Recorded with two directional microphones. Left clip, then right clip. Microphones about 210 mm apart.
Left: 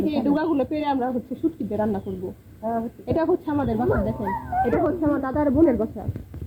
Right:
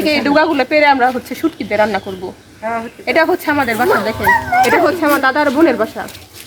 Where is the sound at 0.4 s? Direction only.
25° right (ahead or behind).